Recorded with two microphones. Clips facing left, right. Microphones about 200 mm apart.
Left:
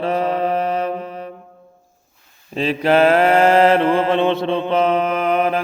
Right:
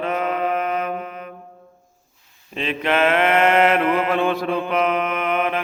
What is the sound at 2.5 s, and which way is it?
Mantra, 35° left (ahead or behind).